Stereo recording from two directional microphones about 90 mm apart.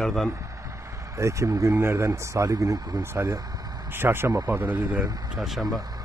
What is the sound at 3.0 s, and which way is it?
Speech, 30° right (ahead or behind).